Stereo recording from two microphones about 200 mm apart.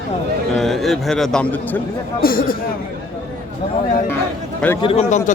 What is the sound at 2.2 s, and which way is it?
Speech, 45° left (ahead or behind).